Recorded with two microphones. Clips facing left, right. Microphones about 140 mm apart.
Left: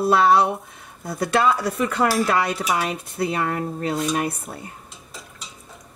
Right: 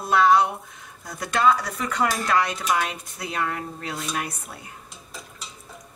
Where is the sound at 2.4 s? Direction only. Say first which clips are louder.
Left 3 dB; 5° left (ahead or behind).